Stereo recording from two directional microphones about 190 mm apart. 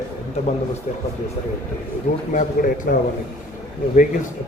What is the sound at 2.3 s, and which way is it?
Speech, 45° left (ahead or behind).